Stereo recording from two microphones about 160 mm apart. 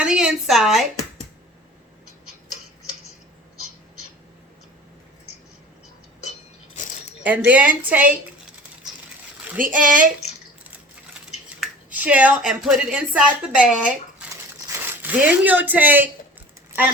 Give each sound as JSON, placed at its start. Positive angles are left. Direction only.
{"t": 0.0, "sound": "speech", "side_deg": -5}
{"t": 7.3, "sound": "a woman's voice", "side_deg": -10}
{"t": 9.6, "sound": "speech", "side_deg": -55}
{"t": 11.4, "sound": "speech", "side_deg": -10}